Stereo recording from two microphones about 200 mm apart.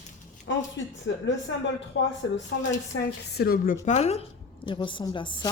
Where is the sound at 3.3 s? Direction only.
50° left (ahead or behind).